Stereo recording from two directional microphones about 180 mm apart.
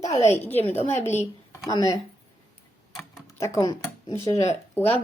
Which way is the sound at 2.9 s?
15° left (ahead or behind).